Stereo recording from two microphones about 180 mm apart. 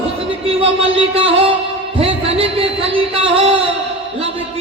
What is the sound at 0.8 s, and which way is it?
Speech, 30° right (ahead or behind).